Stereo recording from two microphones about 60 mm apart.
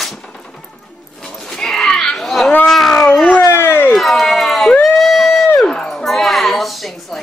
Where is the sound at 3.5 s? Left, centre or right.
Left.